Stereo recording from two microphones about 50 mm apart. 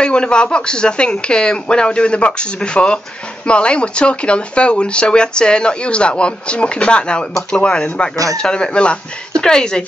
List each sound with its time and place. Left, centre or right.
0.0 s speech: centre